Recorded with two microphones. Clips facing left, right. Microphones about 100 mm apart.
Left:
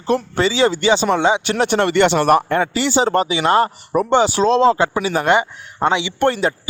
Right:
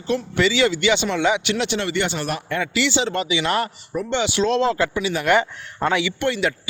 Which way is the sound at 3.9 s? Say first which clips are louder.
Left 9 dB; 60° left (ahead or behind).